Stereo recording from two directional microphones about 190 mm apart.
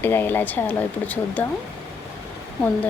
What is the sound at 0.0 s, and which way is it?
Speech, 10° left (ahead or behind).